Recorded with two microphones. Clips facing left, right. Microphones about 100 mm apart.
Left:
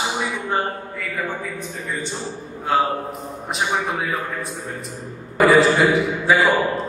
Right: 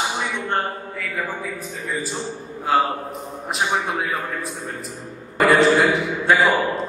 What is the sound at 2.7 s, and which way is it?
A man's voice, centre (ahead or behind).